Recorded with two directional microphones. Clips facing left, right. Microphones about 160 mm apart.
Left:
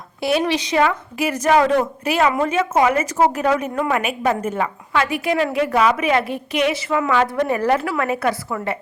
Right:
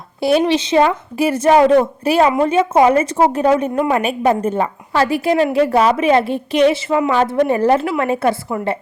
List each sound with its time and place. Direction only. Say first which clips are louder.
0.2 s a woman's voice: right 5 dB; 30° right (ahead or behind)